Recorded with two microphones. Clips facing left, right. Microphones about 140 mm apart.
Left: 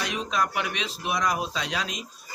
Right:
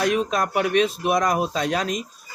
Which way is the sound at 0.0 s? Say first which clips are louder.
Right 6 dB; 50° right (ahead or behind).